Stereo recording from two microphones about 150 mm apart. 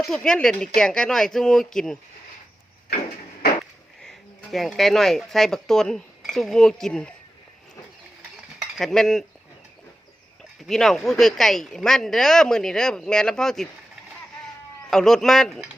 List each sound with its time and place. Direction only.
0.0 s speech: 5° left (ahead or behind)
4.0 s speech: 5° left (ahead or behind)
8.5 s cutlery: centre (ahead or behind)
10.7 s speech: centre (ahead or behind)
14.8 s speech: centre (ahead or behind)